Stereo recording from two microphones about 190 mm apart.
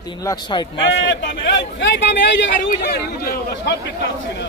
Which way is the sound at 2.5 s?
50° left (ahead or behind).